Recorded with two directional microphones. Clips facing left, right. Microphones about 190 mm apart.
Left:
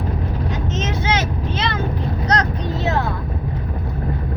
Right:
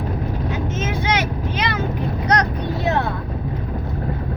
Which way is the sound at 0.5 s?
10° right (ahead or behind).